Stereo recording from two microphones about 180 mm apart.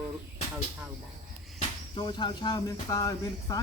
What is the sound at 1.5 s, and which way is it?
Speech, 25° left (ahead or behind).